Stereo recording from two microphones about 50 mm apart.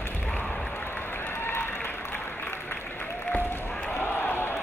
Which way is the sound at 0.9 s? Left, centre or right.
Left.